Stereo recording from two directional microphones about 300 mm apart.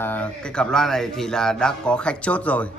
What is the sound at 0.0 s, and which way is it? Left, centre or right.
Speech, centre.